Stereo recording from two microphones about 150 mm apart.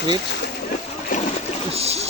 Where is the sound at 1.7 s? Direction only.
45° right (ahead or behind).